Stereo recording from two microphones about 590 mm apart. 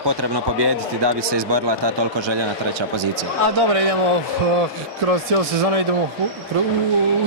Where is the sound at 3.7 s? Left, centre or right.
Right.